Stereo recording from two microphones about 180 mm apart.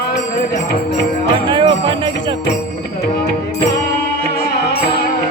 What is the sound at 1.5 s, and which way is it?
Jingle bell, 25° right (ahead or behind).